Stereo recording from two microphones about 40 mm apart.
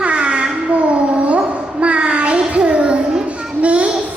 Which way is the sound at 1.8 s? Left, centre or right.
Right.